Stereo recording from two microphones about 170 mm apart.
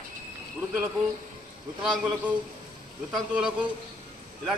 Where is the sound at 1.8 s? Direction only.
5° right (ahead or behind).